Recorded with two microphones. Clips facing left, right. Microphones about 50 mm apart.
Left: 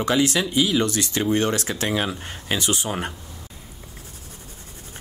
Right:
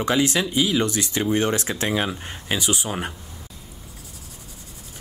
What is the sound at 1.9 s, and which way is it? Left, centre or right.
Speech, centre.